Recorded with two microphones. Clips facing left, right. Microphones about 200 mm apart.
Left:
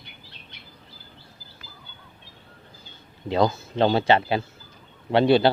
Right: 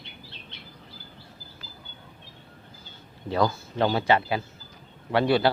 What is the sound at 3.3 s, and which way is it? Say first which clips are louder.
A man's voice: left 3 dB; 20° left (ahead or behind).